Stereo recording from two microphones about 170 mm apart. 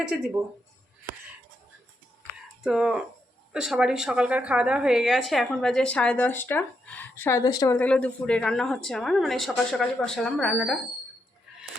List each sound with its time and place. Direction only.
0.1 s a woman's voice: 5° right (ahead or behind)
2.6 s a woman's voice: 5° right (ahead or behind); by 7.8 s 20° left (ahead or behind)
7.8 s a woman's voice: 10° left (ahead or behind)